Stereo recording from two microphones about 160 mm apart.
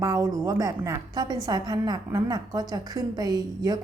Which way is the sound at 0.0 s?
20° right (ahead or behind).